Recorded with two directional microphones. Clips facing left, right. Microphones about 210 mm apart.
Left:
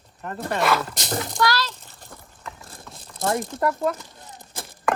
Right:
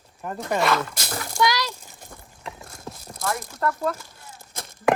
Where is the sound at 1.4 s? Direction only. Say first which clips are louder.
Right 1 dB; 15° right (ahead or behind).